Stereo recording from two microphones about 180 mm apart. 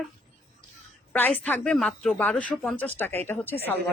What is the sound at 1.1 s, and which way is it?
Speech, 10° left (ahead or behind).